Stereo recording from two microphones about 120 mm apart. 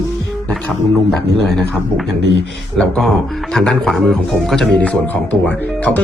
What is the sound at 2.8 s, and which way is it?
Speech, 5° left (ahead or behind).